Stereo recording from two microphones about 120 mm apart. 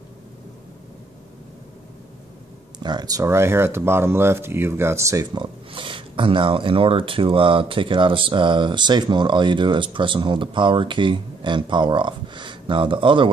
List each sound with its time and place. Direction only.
2.8 s speech: 35° right (ahead or behind)
5.3 s speech: 45° right (ahead or behind)